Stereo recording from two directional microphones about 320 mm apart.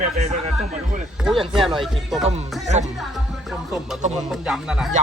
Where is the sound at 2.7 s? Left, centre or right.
Right.